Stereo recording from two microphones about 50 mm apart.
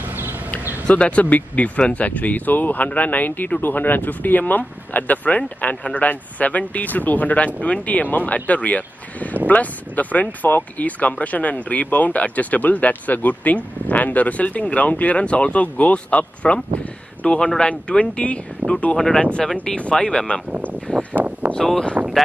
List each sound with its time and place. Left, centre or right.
0.1 s a sound: right
0.8 s speech: left
18.6 s speech: right
18.9 s speech: centre
19.5 s speech: centre
20.6 s a sound: right
21.5 s speech: centre